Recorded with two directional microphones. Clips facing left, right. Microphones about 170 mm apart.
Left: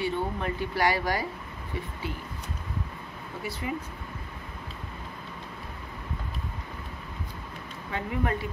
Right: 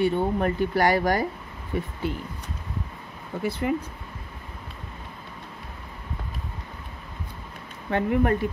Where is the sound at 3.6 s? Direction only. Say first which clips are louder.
Right 7 dB; 50° right (ahead or behind).